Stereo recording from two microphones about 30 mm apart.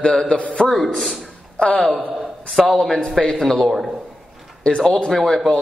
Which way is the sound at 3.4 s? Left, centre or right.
Left.